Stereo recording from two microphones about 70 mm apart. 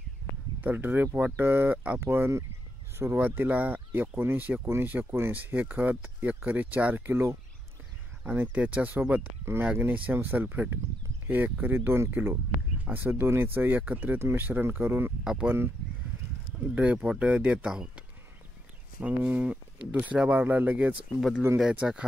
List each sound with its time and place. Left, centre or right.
0.6 s speech: right
2.0 s speech: right
7.1 s speech: right
8.2 s speech: centre
9.4 s speech: right
9.8 s speech: right
12.1 s speech: right
14.1 s speech: right
16.7 s speech: centre
21.8 s speech: centre